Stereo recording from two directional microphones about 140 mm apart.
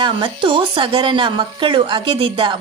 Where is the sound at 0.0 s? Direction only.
35° right (ahead or behind).